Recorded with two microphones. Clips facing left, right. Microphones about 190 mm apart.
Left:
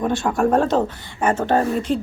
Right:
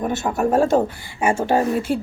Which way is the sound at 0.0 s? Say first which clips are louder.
Left 2 dB; 5° right (ahead or behind).